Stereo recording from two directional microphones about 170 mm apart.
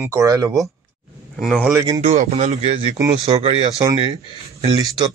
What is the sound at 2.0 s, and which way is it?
Speech, 40° right (ahead or behind).